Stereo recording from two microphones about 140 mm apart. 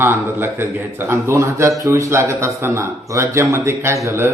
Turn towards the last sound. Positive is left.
turn(degrees=-20)  # may be behind; listen again after turning